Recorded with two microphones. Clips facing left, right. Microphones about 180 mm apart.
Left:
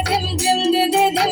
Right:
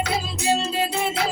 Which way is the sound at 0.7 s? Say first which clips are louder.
Left 9 dB; 90° left.